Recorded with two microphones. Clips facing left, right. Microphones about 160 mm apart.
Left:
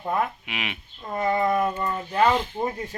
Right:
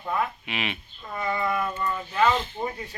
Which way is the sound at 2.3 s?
10° left (ahead or behind).